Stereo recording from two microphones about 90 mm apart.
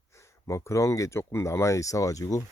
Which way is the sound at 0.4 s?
35° left (ahead or behind).